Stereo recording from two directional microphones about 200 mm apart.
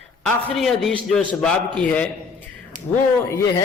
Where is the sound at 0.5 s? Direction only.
Centre (ahead or behind).